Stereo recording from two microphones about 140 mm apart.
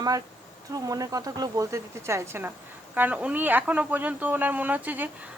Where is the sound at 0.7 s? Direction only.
25° right (ahead or behind).